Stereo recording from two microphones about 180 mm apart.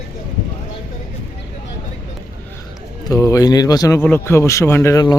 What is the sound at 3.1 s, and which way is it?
A man's voice, 20° left (ahead or behind).